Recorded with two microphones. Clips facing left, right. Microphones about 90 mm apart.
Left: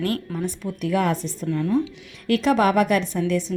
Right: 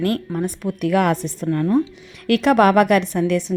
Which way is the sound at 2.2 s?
70° right (ahead or behind).